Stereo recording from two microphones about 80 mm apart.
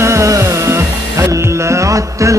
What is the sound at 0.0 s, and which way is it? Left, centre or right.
Music, right.